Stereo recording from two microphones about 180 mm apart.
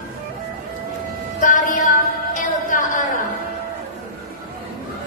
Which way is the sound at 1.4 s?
50° left (ahead or behind).